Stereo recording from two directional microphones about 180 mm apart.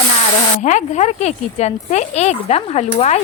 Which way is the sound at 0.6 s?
40° left (ahead or behind).